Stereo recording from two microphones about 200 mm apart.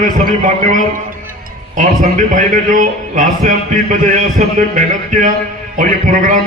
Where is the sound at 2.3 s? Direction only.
40° right (ahead or behind).